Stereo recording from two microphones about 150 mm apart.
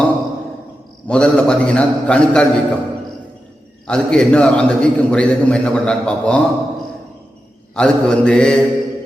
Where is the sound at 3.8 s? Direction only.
5° left (ahead or behind).